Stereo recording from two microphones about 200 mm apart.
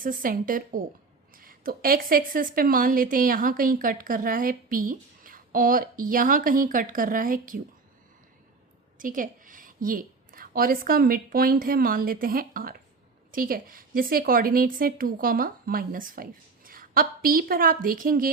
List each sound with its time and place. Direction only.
0.0 s a woman's voice: 45° right (ahead or behind)
9.0 s a woman's voice: 40° right (ahead or behind)